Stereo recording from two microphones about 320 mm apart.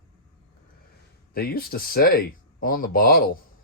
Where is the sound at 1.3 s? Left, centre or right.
Left.